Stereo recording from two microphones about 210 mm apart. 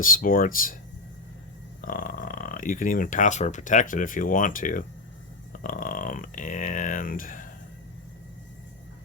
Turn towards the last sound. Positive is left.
turn(degrees=40)  # may be behind; listen again after turning